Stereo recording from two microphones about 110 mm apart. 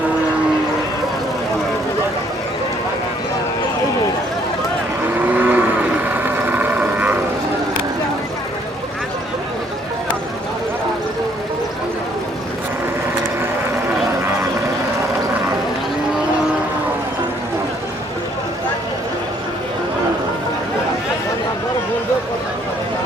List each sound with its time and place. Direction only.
5.2 s cattle: 15° right (ahead or behind)